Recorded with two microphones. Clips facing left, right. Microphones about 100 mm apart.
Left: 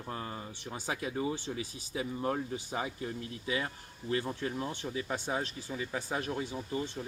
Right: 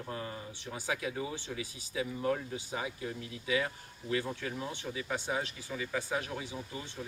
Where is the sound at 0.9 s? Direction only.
35° left (ahead or behind).